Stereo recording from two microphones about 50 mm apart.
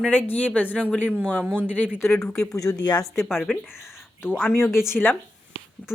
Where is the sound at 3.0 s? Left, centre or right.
Centre.